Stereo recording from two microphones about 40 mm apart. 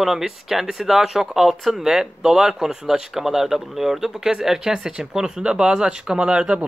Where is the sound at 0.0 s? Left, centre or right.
Centre.